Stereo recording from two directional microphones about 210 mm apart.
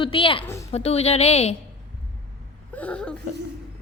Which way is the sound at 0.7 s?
30° left (ahead or behind).